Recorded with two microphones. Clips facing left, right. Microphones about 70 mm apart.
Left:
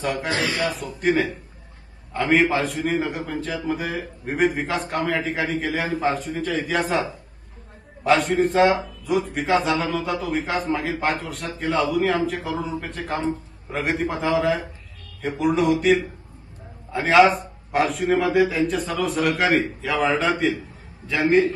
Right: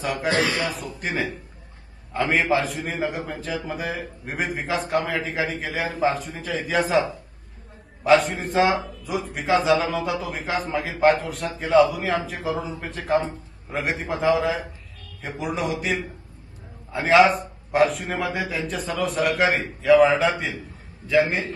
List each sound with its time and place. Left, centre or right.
0.0 s a man's voice: centre
0.3 s speech: right
0.6 s a man's voice: centre